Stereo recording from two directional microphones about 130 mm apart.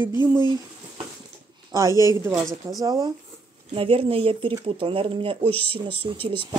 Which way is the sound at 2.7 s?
30° right (ahead or behind).